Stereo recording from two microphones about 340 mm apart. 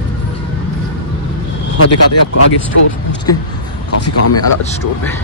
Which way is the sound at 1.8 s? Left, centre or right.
Left.